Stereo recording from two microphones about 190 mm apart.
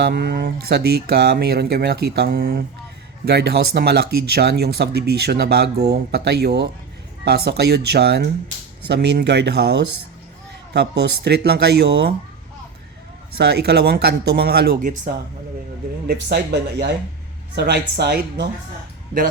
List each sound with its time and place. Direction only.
0.0 s speech: 55° right (ahead or behind)
13.4 s speech: 60° right (ahead or behind); by 15.1 s 40° right (ahead or behind)
16.0 s speech: 60° right (ahead or behind)